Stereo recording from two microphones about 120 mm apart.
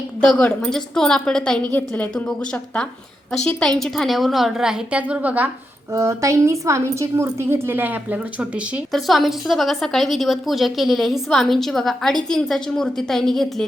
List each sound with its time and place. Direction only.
0.3 s a woman's voice: 5° left (ahead or behind); by 5.5 s 10° right (ahead or behind)
5.9 s a woman's voice: 25° right (ahead or behind); by 8.8 s 10° right (ahead or behind)
8.9 s a woman's voice: centre (ahead or behind)